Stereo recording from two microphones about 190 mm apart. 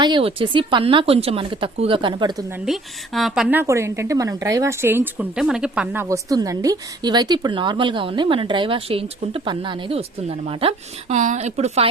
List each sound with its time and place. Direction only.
0.0 s speech: 25° right (ahead or behind)
3.2 s a woman's voice: centre (ahead or behind); by 11.9 s 35° right (ahead or behind)